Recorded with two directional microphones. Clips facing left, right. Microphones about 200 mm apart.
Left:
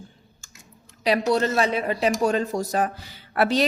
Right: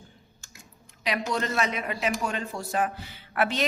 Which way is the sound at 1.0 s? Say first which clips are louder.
Left 8 dB; 35° left (ahead or behind).